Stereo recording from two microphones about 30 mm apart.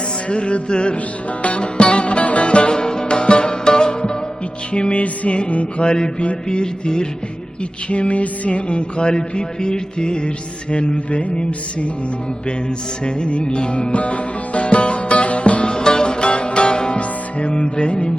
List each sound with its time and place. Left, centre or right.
0.3 s music: left
4.7 s music: left
5.8 s music: left
7.9 s music: left
13.1 s music: left
15.7 s music: left